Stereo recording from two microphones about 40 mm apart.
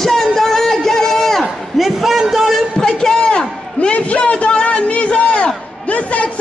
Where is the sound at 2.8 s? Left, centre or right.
Centre.